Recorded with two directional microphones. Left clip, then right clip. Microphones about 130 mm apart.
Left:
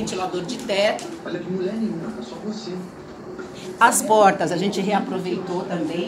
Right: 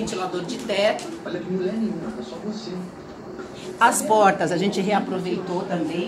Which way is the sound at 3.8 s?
60° left (ahead or behind).